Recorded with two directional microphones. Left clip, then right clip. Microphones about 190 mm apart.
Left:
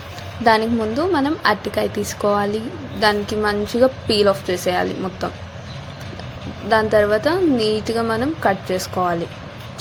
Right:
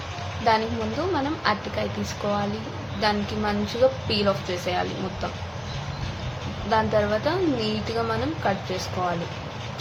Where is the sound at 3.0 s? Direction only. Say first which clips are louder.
Left 7 dB; 40° left (ahead or behind).